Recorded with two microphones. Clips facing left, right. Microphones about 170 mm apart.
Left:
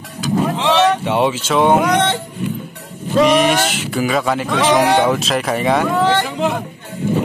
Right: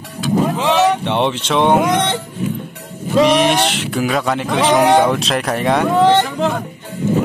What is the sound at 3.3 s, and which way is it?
Speech, centre (ahead or behind).